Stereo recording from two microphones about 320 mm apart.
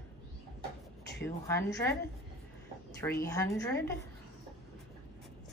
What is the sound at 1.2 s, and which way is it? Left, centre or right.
Speech, centre.